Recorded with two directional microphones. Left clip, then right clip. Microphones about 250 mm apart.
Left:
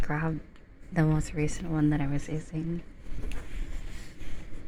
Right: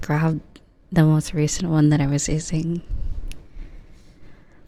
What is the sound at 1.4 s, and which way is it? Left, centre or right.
Speech, right.